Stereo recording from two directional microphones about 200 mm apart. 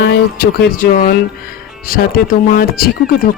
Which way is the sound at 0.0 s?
55° left (ahead or behind).